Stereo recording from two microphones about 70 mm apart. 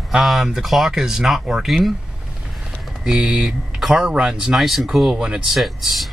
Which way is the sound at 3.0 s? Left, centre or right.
Centre.